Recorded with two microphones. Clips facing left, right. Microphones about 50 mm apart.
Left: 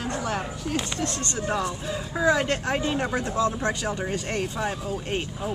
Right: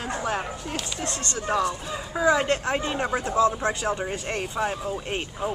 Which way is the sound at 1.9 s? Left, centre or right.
Centre.